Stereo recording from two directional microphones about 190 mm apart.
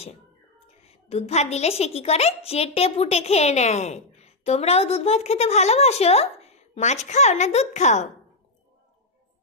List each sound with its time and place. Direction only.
0.8 s a woman's voice: 35° left (ahead or behind)